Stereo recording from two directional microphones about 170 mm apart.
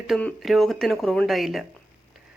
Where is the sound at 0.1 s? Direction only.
5° left (ahead or behind).